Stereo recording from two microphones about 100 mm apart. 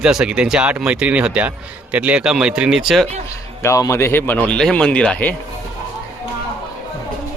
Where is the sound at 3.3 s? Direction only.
30° left (ahead or behind); by 5.4 s 15° left (ahead or behind).